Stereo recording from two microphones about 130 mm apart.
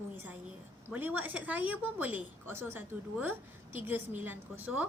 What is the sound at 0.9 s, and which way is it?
A woman's voice, 15° right (ahead or behind).